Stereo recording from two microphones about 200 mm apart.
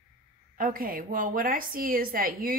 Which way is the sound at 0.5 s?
45° right (ahead or behind).